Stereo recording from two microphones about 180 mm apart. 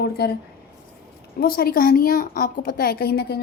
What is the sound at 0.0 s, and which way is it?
Speech, 60° left (ahead or behind).